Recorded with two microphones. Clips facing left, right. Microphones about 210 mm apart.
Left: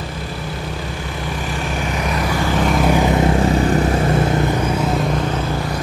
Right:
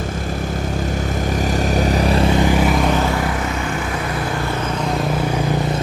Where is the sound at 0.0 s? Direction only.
45° right (ahead or behind); by 2.5 s 25° right (ahead or behind).